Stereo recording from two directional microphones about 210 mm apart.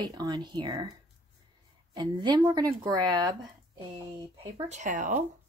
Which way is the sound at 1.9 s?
20° right (ahead or behind).